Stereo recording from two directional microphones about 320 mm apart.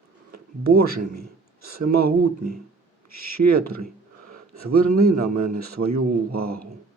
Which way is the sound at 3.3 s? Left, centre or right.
Right.